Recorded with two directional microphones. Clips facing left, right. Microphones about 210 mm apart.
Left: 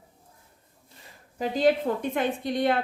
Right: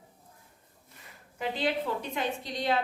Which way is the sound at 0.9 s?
35° left (ahead or behind).